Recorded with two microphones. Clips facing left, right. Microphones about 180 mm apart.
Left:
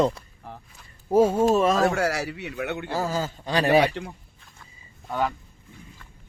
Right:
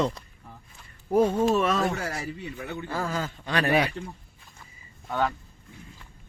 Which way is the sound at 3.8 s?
80° left.